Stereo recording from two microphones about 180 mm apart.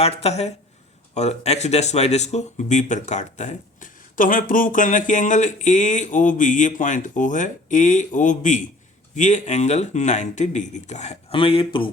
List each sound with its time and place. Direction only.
0.0 s speech: 35° left (ahead or behind)